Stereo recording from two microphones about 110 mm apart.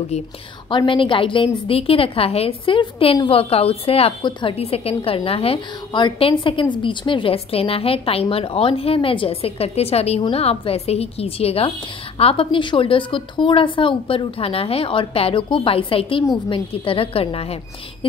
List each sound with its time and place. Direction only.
0.7 s a woman's voice: 50° left (ahead or behind)
4.6 s a woman's voice: 60° left (ahead or behind)